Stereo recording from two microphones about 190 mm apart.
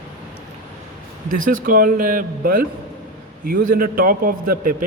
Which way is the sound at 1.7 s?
50° right (ahead or behind).